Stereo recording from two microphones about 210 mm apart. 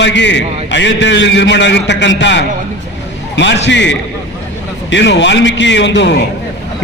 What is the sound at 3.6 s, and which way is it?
A man's voice, 60° left (ahead or behind).